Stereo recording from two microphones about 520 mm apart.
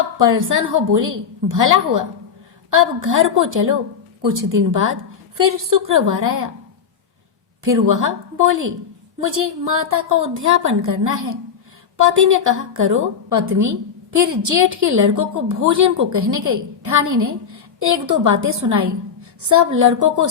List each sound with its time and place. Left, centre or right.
0.3 s a woman's voice: right
7.6 s a woman's voice: right